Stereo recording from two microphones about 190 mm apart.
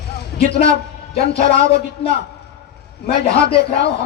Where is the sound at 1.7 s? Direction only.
55° left (ahead or behind).